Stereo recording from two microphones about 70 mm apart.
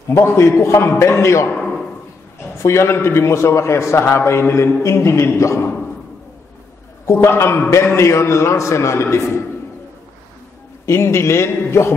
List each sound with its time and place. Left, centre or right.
0.1 s a man's voice: left
2.6 s a man's voice: left
7.1 s a man's voice: left
10.9 s a man's voice: left